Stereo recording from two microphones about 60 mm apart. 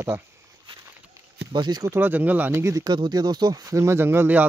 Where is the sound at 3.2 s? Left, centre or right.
Right.